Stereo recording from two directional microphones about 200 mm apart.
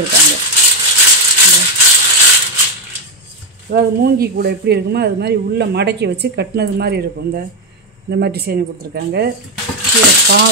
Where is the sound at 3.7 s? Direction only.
50° right (ahead or behind).